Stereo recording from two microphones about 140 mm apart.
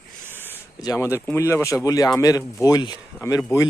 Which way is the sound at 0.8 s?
25° left (ahead or behind).